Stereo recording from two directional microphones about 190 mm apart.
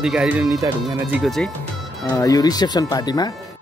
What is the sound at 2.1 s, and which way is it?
Speech, 20° left (ahead or behind).